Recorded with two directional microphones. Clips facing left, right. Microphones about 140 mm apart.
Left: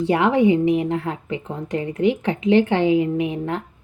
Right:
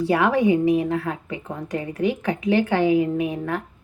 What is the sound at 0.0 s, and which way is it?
A woman's voice, 20° left (ahead or behind).